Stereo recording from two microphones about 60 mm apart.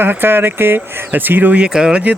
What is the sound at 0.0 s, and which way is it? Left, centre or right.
Speech, right.